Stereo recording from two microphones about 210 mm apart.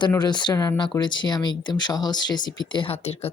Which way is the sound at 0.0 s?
20° left (ahead or behind).